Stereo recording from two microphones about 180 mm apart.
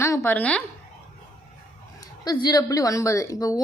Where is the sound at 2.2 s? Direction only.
25° left (ahead or behind).